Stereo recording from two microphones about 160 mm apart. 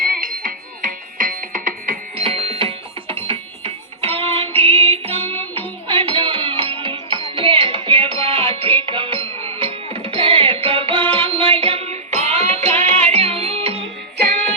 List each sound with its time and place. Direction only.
0.0 s music: 60° right (ahead or behind)
2.1 s music: 35° right (ahead or behind)